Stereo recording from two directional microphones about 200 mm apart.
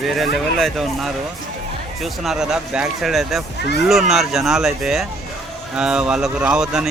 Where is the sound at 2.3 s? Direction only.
5° right (ahead or behind).